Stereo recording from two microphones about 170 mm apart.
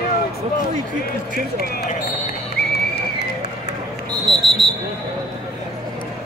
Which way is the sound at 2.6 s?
65° left (ahead or behind).